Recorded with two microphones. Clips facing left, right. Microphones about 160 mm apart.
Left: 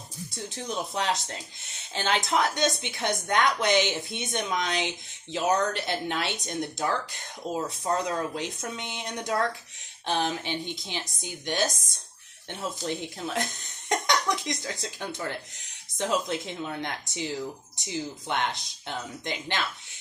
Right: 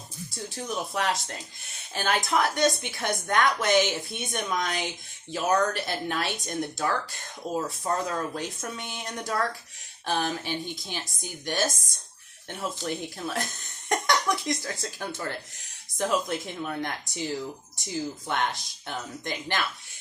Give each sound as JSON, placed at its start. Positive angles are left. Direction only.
{"t": 0.7, "sound": "speech", "side_deg": 20}